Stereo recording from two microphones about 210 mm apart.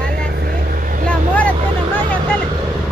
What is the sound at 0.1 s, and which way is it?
Vehicle, 45° right (ahead or behind).